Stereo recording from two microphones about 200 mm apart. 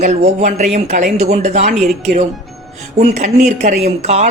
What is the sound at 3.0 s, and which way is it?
Speech, 35° right (ahead or behind).